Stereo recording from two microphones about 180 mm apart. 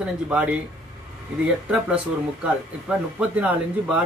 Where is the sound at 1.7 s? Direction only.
5° right (ahead or behind).